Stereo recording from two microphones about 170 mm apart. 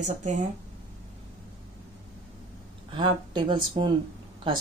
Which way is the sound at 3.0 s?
30° right (ahead or behind).